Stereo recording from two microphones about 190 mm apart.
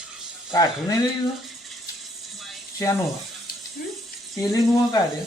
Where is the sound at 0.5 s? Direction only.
20° left (ahead or behind).